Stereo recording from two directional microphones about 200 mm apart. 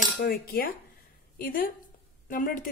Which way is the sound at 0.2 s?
45° left (ahead or behind).